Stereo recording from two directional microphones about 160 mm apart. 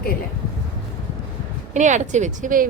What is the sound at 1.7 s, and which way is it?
Speech, 50° right (ahead or behind).